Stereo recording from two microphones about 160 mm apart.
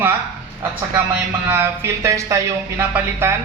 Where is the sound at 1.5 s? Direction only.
15° right (ahead or behind).